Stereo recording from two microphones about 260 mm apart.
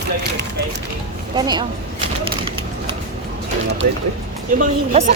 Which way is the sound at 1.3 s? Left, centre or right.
Centre.